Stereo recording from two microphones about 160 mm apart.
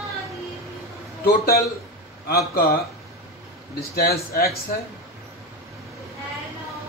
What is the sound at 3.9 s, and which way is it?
Speech, 70° left (ahead or behind).